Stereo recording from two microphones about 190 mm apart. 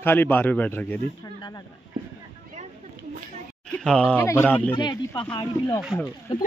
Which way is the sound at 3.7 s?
5° left (ahead or behind).